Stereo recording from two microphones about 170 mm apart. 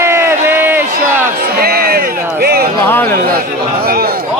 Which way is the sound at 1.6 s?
65° right (ahead or behind).